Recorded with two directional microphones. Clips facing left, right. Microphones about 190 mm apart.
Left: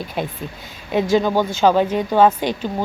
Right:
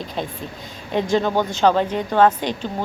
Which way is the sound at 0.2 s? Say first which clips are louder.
Left 3 dB; 10° left (ahead or behind).